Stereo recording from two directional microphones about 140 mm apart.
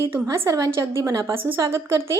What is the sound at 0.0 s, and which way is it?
A woman's voice, 20° right (ahead or behind).